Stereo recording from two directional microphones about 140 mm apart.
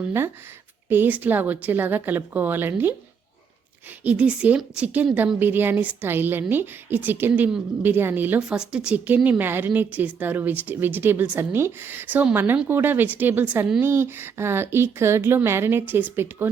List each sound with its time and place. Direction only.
0.0 s a woman's voice: 15° right (ahead or behind)
4.0 s a woman's voice: 10° right (ahead or behind)